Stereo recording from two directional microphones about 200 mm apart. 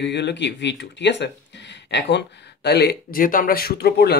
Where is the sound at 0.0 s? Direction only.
60° left (ahead or behind).